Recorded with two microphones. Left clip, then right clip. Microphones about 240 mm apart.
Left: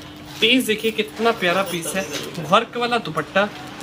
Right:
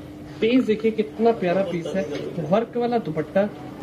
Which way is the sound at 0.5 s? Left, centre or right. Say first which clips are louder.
Left 1 dB; left.